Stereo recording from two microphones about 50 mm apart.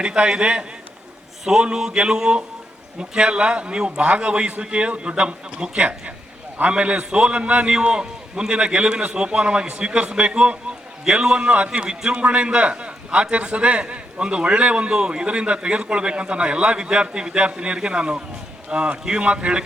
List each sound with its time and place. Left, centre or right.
0.0 s a man's voice: centre
1.5 s a sound: centre
3.0 s a man's voice: centre